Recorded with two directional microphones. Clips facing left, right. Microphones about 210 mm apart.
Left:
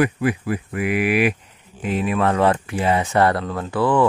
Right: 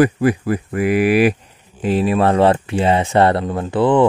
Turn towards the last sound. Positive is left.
turn(degrees=-20)  # may be behind; listen again after turning